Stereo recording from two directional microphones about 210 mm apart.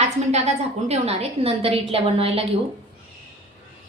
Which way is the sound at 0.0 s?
30° right (ahead or behind).